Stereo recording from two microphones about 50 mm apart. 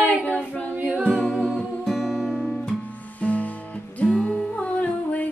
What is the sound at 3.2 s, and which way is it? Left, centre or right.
Music, left.